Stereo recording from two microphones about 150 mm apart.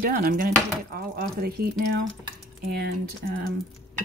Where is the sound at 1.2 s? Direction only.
90° right.